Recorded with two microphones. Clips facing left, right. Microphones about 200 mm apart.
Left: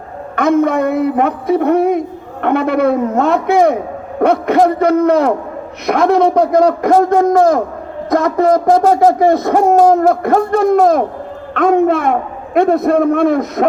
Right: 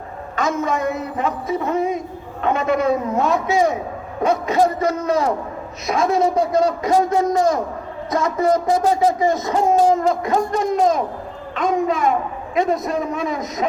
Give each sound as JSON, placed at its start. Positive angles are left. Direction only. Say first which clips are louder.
{"t": 0.3, "sound": "a woman's voice", "louder": "left 9 dB", "side_deg": 60}